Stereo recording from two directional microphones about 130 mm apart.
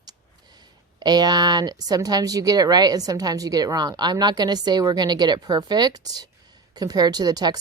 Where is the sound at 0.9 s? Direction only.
30° right (ahead or behind).